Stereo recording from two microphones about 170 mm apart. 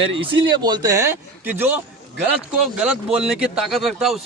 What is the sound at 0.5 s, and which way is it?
A man's voice, 25° right (ahead or behind).